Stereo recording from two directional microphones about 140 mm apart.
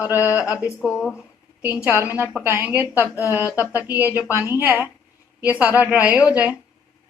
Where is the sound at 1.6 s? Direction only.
10° right (ahead or behind).